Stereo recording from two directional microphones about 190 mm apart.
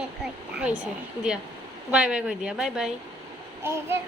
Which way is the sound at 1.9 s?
5° right (ahead or behind).